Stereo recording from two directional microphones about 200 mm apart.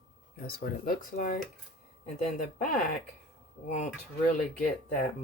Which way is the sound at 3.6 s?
35° left (ahead or behind).